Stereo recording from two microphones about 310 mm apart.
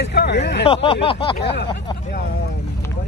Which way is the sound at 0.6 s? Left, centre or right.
Centre.